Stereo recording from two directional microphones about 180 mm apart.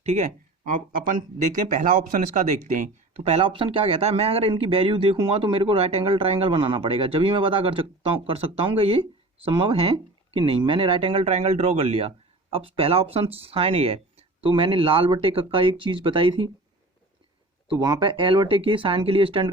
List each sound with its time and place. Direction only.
0.0 s a sound: 40° right (ahead or behind)
1.1 s speech: 50° right (ahead or behind); by 16.5 s 30° right (ahead or behind)
17.7 s speech: 25° right (ahead or behind)